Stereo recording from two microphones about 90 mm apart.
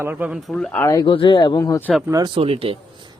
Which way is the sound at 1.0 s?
60° left (ahead or behind).